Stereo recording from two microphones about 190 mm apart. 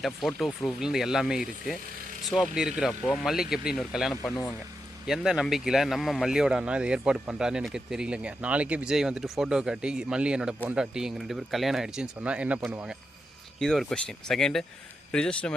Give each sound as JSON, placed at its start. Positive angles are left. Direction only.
{"t": 0.0, "sound": "speech", "side_deg": 0}
{"t": 4.2, "sound": "speech", "side_deg": 15}
{"t": 5.0, "sound": "speech", "side_deg": -5}